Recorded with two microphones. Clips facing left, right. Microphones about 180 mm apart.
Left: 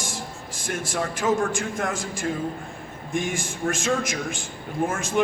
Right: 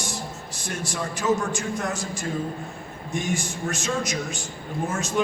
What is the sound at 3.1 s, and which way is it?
Speech, 50° left (ahead or behind).